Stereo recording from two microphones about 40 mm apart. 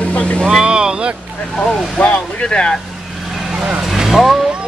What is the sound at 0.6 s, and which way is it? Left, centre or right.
Speech, right.